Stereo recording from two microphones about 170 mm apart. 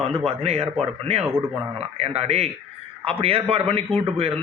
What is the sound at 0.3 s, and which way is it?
A man's voice, 35° right (ahead or behind).